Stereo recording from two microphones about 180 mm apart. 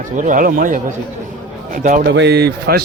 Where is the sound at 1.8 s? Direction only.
45° right (ahead or behind).